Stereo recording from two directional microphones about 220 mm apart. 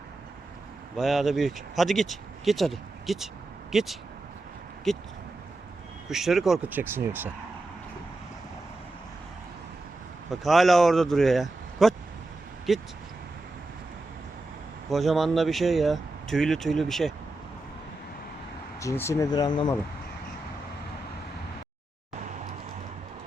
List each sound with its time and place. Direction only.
0.9 s speech: centre (ahead or behind)
6.1 s speech: centre (ahead or behind)
10.2 s speech: centre (ahead or behind)
14.8 s speech: centre (ahead or behind)
18.8 s speech: 15° left (ahead or behind)